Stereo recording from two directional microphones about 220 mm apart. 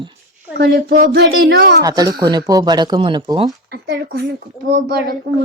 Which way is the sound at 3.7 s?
50° right (ahead or behind).